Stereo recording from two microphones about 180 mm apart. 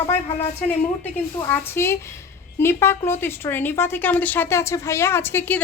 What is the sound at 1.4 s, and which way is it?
Speech, 15° left (ahead or behind).